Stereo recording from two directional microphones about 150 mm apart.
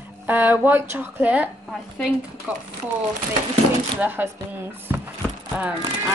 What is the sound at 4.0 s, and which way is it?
Speech, 15° right (ahead or behind).